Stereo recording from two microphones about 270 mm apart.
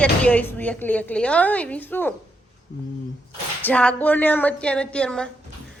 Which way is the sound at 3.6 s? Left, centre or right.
Centre.